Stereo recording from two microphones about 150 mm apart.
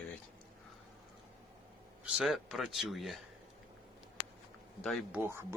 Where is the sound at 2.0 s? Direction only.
5° right (ahead or behind).